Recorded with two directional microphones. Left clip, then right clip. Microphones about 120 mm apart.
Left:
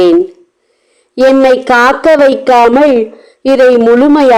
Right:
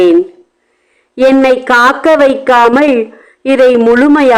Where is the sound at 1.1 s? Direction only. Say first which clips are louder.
Left 1 dB; 30° left (ahead or behind).